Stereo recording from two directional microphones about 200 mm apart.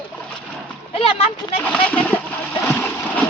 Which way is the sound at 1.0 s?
30° left (ahead or behind).